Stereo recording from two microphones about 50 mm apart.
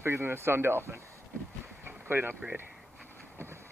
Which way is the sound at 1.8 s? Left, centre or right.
Right.